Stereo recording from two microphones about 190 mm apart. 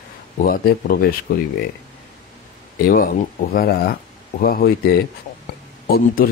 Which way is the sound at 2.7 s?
50° left (ahead or behind).